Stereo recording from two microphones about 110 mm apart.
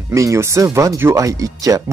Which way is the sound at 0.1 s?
30° right (ahead or behind).